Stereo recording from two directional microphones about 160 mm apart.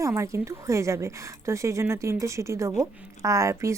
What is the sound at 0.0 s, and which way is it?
A woman's voice, 20° right (ahead or behind).